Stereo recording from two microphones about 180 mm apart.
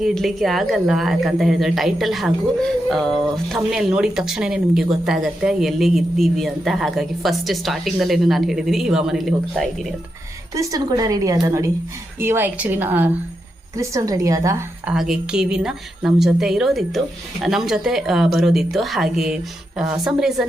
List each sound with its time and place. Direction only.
0.0 s speech: centre (ahead or behind)
10.5 s a woman's voice: 20° right (ahead or behind)
14.8 s speech: centre (ahead or behind)